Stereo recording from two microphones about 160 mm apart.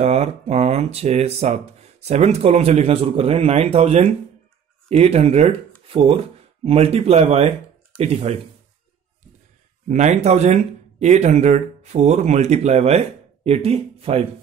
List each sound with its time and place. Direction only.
0.0 s speech: 40° right (ahead or behind)
9.8 s speech: 45° right (ahead or behind)